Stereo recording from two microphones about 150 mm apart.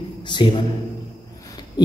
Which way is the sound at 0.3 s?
35° left (ahead or behind).